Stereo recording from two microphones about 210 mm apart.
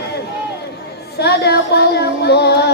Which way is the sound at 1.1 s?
50° left (ahead or behind).